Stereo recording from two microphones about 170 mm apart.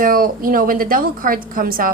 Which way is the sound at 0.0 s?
55° right (ahead or behind).